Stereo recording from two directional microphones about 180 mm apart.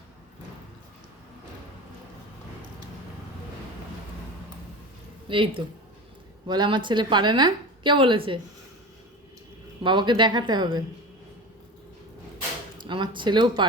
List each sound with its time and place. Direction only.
5.3 s a woman's voice: 30° right (ahead or behind)
9.8 s a woman's voice: 25° right (ahead or behind)
12.7 s speech: 25° right (ahead or behind)